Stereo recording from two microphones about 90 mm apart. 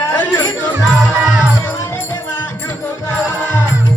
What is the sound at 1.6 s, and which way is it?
Music, 30° left (ahead or behind).